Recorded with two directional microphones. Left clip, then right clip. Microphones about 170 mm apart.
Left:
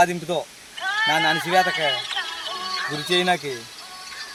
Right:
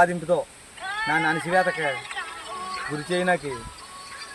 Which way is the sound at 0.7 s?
20° left (ahead or behind).